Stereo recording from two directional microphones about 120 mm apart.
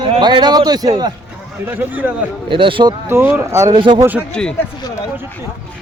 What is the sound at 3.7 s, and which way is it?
Speech, 40° right (ahead or behind).